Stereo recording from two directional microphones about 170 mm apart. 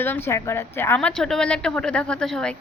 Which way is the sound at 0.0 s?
10° left (ahead or behind).